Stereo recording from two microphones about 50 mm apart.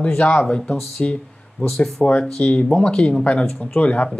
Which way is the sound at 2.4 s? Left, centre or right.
Left.